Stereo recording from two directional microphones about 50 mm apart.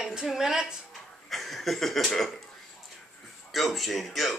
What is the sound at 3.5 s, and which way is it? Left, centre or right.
Speech, centre.